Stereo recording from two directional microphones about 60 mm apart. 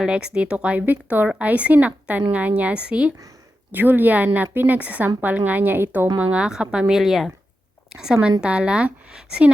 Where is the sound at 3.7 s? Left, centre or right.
Right.